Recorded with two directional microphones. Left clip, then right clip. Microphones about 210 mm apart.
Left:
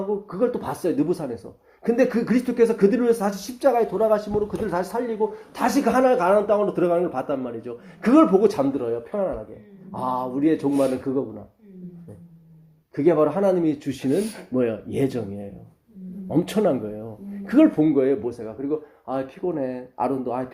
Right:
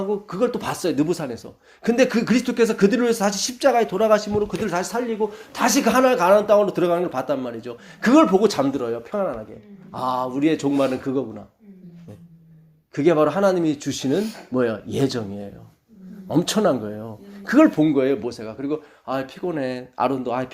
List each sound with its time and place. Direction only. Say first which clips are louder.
0.1 s speech: even; 35° right (ahead or behind)
13.0 s speech: right 2 dB; 30° right (ahead or behind)